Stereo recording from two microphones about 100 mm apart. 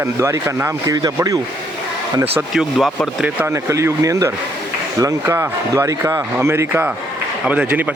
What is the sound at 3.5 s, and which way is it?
Speech, 30° right (ahead or behind).